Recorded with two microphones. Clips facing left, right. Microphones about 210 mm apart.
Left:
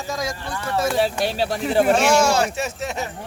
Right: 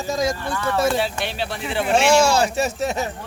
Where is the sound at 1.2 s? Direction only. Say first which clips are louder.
Left 4 dB; 40° left (ahead or behind).